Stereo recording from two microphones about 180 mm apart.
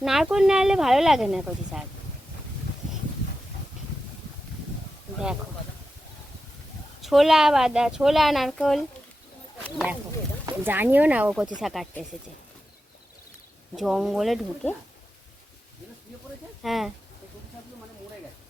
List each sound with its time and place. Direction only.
0.0 s a woman's voice: centre (ahead or behind)
7.0 s a woman's voice: centre (ahead or behind)
10.4 s a woman's voice: 10° right (ahead or behind)
13.7 s a woman's voice: centre (ahead or behind)
16.6 s a woman's voice: centre (ahead or behind)